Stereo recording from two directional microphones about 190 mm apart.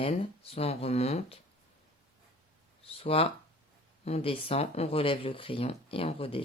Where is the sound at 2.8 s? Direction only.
30° left (ahead or behind).